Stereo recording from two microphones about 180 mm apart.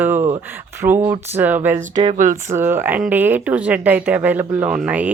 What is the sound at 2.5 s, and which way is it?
Speech, 10° right (ahead or behind).